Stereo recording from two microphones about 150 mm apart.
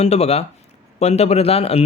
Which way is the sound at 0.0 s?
45° left (ahead or behind).